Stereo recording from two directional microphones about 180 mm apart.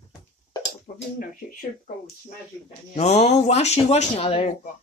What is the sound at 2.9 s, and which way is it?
Speech, 35° left (ahead or behind).